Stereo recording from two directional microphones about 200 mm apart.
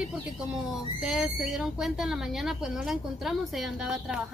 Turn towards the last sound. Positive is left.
turn(degrees=0)  # may be behind; listen again after turning